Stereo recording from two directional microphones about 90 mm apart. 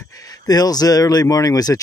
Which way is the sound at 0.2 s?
45° left (ahead or behind).